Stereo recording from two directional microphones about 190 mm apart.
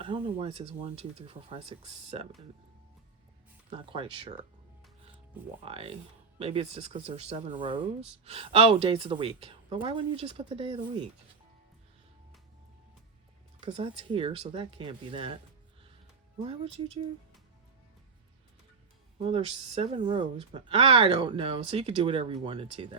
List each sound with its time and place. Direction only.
0.0 s speech: 30° right (ahead or behind)
3.7 s speech: 30° right (ahead or behind)
5.6 s speech: 30° right (ahead or behind)
13.6 s speech: 30° right (ahead or behind)
16.4 s speech: 30° right (ahead or behind)
19.2 s speech: 30° right (ahead or behind)